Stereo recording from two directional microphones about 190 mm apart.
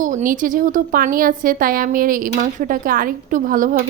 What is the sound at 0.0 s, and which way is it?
A woman's voice, 45° right (ahead or behind).